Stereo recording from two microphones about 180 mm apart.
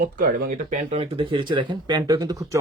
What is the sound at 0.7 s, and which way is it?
Speech, 35° right (ahead or behind).